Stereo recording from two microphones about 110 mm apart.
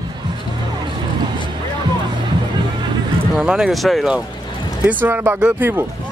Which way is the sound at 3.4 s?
5° right (ahead or behind).